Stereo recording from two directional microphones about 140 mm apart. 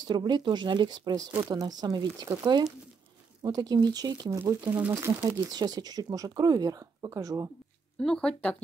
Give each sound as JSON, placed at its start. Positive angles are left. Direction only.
{"t": 0.0, "sound": "speech", "side_deg": -30}
{"t": 4.4, "sound": "speech", "side_deg": -15}
{"t": 5.5, "sound": "speech", "side_deg": -30}
{"t": 8.0, "sound": "speech", "side_deg": 5}